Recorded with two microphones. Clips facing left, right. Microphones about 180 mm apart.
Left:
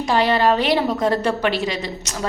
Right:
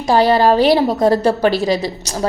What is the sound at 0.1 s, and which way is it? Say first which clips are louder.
A woman's voice: right 5 dB; 35° right (ahead or behind).